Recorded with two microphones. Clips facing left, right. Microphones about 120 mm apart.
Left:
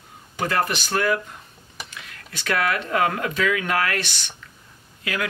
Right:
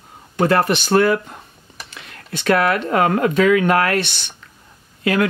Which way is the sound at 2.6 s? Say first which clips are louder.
Right 2 dB; 35° right (ahead or behind).